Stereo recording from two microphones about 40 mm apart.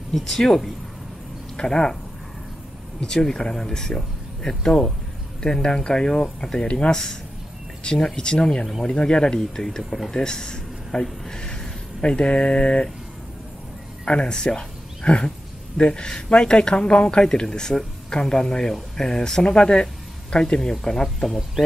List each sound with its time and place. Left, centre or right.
0.1 s speech: centre
1.6 s speech: centre
3.0 s speech: centre
14.0 s speech: left